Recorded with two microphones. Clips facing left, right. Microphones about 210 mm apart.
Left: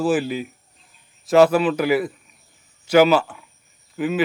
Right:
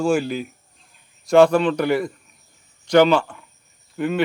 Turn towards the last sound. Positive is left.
turn(degrees=5)  # may be behind; listen again after turning